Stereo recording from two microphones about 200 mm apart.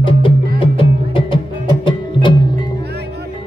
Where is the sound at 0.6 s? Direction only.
25° left (ahead or behind).